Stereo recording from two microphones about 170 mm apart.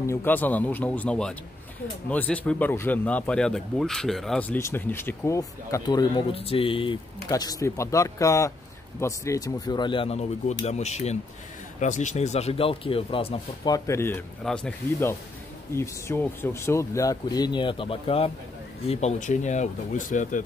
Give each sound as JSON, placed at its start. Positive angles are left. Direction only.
{"t": 0.0, "sound": "speech", "side_deg": 15}
{"t": 6.3, "sound": "speech", "side_deg": 35}
{"t": 13.7, "sound": "speech", "side_deg": 20}